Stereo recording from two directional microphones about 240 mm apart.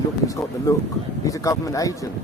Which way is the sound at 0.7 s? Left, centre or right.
Centre.